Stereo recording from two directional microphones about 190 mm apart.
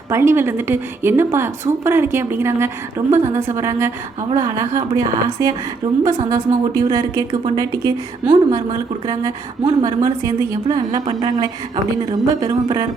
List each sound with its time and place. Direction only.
0.1 s a woman's voice: 15° right (ahead or behind)